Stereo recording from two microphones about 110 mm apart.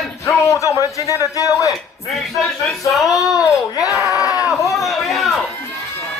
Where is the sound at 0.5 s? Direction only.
30° left (ahead or behind).